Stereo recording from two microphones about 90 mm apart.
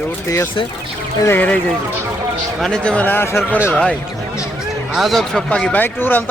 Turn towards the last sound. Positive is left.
turn(degrees=25)  # may be behind; listen again after turning